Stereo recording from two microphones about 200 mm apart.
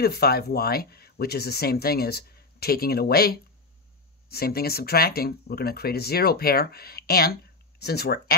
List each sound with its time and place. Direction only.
0.0 s speech: 50° left (ahead or behind)